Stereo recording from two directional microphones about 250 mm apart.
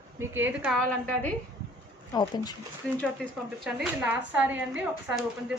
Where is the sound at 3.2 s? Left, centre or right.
Centre.